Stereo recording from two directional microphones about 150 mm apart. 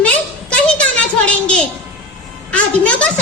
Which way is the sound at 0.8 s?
5° left (ahead or behind).